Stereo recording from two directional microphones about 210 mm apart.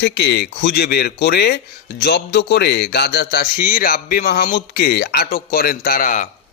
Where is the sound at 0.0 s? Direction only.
55° left (ahead or behind).